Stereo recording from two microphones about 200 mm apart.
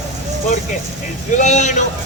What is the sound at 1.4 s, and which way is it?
Speech, 35° left (ahead or behind).